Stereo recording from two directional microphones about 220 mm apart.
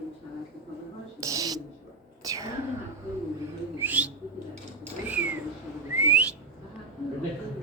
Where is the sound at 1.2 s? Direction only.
15° right (ahead or behind).